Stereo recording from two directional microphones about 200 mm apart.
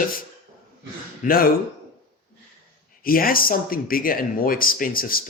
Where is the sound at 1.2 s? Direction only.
45° left (ahead or behind).